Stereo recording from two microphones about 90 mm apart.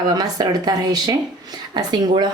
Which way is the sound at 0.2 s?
45° right (ahead or behind).